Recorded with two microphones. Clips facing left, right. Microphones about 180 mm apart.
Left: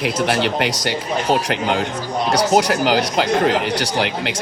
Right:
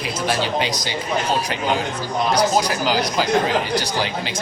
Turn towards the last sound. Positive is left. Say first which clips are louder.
# left 3 dB
turn(degrees=80)